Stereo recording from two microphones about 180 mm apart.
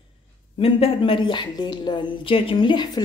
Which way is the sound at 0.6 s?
30° left (ahead or behind).